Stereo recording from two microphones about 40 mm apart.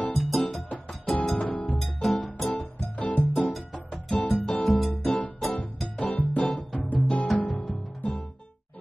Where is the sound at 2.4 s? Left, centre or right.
Left.